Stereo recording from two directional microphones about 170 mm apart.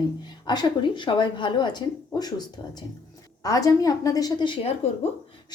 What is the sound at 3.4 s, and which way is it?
A woman's voice, 20° left (ahead or behind).